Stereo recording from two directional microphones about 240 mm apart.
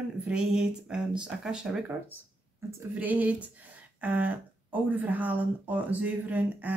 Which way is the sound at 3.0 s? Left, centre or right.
Centre.